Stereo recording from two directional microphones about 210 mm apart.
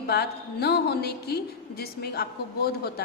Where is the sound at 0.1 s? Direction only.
50° left (ahead or behind).